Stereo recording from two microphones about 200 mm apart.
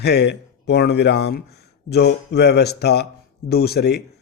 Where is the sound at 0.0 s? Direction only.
55° left (ahead or behind).